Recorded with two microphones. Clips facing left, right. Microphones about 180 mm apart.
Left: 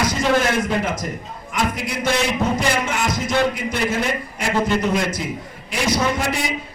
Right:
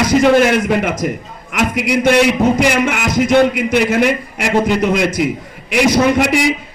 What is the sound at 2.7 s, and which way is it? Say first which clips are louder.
A man's voice: right 7 dB; 85° right.